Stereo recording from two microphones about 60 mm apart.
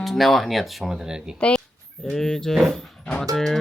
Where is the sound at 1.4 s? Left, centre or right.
Centre.